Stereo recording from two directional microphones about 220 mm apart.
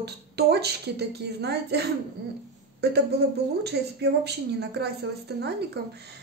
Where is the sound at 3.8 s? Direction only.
50° right (ahead or behind).